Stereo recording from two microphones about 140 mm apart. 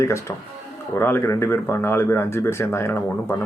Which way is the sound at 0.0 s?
20° left (ahead or behind).